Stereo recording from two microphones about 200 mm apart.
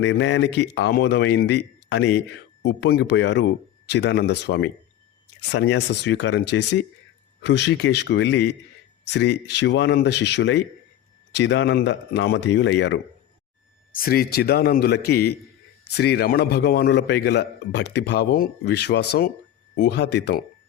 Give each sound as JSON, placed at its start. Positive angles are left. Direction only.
{"t": 0.0, "sound": "a man's voice", "side_deg": 60}
{"t": 13.9, "sound": "a man's voice", "side_deg": 50}